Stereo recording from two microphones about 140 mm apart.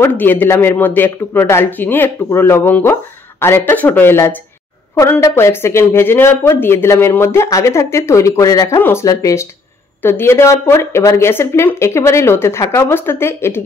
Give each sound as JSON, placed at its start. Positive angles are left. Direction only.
{"t": 0.0, "sound": "a man's voice", "side_deg": 15}